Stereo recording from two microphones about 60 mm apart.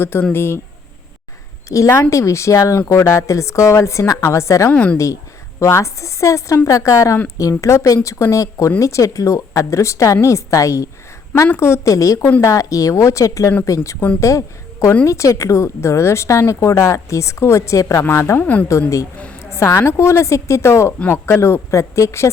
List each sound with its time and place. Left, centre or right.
0.0 s speech: left
1.7 s a woman's voice: left
4.7 s a woman's voice: left
5.5 s a woman's voice: left
18.3 s a woman's voice: left
19.4 s a sound: left
19.8 s speech: left